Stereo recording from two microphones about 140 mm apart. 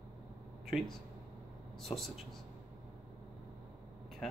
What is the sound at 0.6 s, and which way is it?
Speech, centre (ahead or behind).